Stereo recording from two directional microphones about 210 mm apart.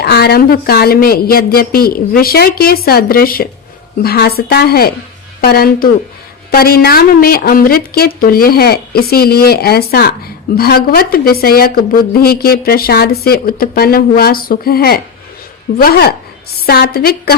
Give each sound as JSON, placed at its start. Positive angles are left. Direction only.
{"t": 0.0, "sound": "a woman's voice", "side_deg": 50}